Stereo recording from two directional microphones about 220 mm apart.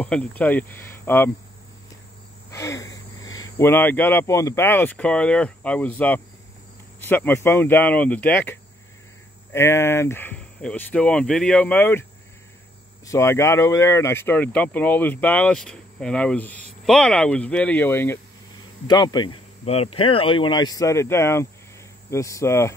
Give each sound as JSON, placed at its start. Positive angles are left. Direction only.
{"t": 0.0, "sound": "speech", "side_deg": 5}
{"t": 2.5, "sound": "cricket", "side_deg": 15}
{"t": 3.2, "sound": "cricket", "side_deg": 60}
{"t": 3.4, "sound": "speech", "side_deg": 10}